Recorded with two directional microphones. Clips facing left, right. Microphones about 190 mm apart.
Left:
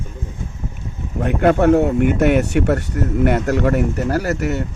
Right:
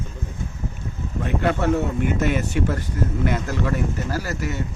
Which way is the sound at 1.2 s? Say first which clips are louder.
Left 7 dB; 55° left (ahead or behind).